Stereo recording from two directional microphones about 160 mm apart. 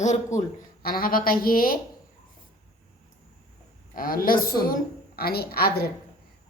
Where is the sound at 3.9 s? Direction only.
65° left (ahead or behind).